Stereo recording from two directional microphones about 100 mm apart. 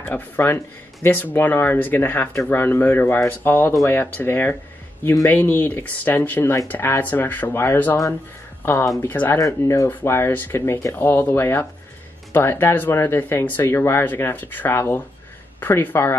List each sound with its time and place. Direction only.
0.0 s speech: 20° left (ahead or behind)
9.1 s speech: 15° left (ahead or behind)